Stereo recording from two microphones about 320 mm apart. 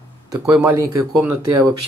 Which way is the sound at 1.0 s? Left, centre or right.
Right.